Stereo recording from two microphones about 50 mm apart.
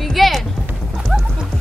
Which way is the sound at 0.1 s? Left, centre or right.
Centre.